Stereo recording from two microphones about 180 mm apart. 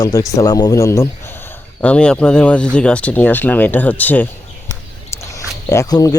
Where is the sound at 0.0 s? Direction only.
20° left (ahead or behind).